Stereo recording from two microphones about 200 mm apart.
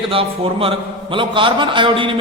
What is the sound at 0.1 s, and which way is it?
A man's voice, 25° right (ahead or behind).